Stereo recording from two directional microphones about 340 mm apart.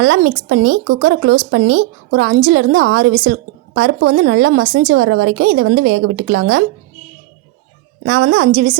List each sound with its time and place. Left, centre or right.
0.0 s speech: right
8.0 s speech: right